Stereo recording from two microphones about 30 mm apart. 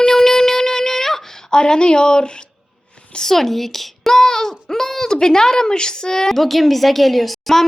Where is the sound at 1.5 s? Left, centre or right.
Left.